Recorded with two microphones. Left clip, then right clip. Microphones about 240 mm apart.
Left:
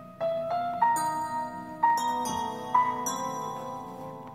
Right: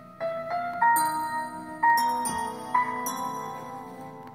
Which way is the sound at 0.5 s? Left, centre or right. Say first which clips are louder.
Right 4 dB; right.